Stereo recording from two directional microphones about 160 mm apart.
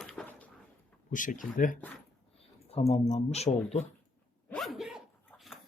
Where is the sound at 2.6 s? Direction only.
40° left (ahead or behind).